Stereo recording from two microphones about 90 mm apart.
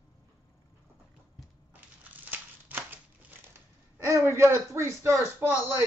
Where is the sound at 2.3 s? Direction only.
20° right (ahead or behind).